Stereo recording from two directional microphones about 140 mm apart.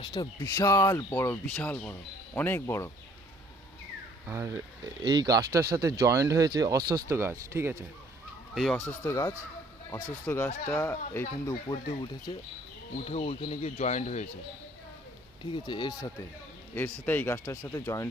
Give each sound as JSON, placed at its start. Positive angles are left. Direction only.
{"t": 0.0, "sound": "speech", "side_deg": 40}
{"t": 0.3, "sound": "speech", "side_deg": 25}
{"t": 4.3, "sound": "speech", "side_deg": -20}
{"t": 8.5, "sound": "speech", "side_deg": 0}
{"t": 8.9, "sound": "speech", "side_deg": 20}
{"t": 11.7, "sound": "speech", "side_deg": 35}
{"t": 13.7, "sound": "speech", "side_deg": 55}
{"t": 15.4, "sound": "speech", "side_deg": 35}
{"t": 16.7, "sound": "speech", "side_deg": 15}